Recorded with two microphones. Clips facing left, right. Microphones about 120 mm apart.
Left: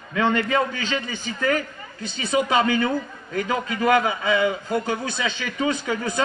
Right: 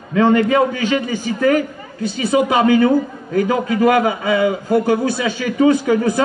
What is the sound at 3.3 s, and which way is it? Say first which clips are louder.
A man's voice: right 8 dB; 25° right (ahead or behind).